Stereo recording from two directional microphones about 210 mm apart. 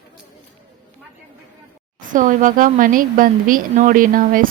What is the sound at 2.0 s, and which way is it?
A woman's voice, 40° right (ahead or behind).